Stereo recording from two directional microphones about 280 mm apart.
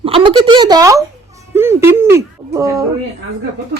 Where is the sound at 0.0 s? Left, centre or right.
Centre.